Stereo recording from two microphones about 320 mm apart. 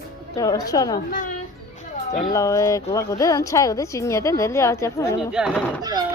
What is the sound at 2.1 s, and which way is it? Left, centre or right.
Speech, centre.